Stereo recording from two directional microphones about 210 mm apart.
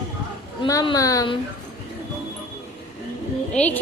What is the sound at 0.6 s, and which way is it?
Speech, 20° left (ahead or behind).